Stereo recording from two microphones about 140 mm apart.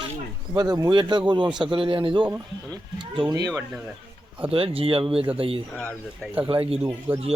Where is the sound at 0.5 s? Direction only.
30° right (ahead or behind).